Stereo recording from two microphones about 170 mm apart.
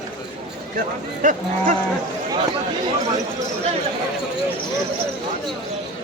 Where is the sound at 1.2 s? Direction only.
50° right (ahead or behind).